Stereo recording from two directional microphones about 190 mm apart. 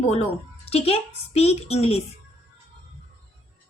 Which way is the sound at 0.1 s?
35° left (ahead or behind).